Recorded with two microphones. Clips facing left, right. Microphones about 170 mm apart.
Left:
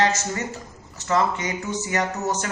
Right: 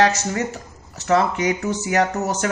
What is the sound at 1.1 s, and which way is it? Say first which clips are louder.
A man's voice: right 4 dB; 65° right (ahead or behind).